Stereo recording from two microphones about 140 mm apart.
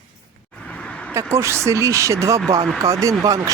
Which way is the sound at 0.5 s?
10° left (ahead or behind).